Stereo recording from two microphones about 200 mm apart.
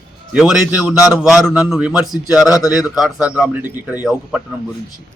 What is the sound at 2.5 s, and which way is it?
Speech, 15° left (ahead or behind).